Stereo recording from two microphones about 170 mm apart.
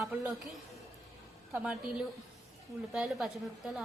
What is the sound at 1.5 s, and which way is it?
A woman's voice, 5° right (ahead or behind).